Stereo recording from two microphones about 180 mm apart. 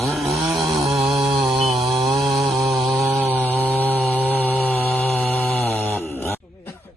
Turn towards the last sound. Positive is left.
turn(degrees=15)  # may be behind; listen again after turning